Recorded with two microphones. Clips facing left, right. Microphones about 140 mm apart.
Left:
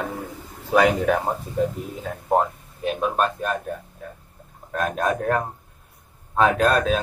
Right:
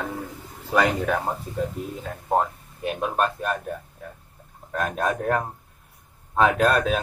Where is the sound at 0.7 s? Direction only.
10° left (ahead or behind).